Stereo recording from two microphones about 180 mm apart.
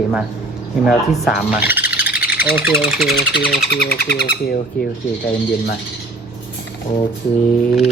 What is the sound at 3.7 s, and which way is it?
Speech, 60° left (ahead or behind).